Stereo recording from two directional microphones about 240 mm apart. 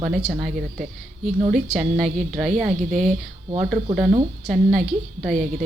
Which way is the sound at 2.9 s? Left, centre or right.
Right.